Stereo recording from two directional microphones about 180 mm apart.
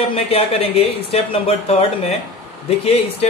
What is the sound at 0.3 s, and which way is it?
Speech, 35° left (ahead or behind).